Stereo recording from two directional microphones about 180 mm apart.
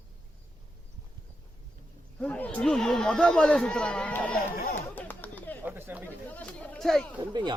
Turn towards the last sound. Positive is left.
turn(degrees=-25)  # may be behind; listen again after turning